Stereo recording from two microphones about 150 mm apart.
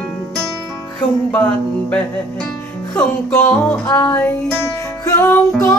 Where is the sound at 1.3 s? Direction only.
10° left (ahead or behind).